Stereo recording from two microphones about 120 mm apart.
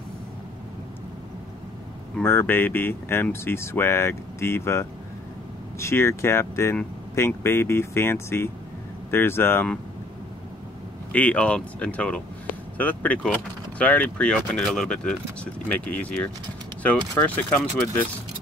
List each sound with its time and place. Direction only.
2.2 s speech: 20° left (ahead or behind)
11.1 s speech: 10° left (ahead or behind)
17.4 s speech: 15° left (ahead or behind)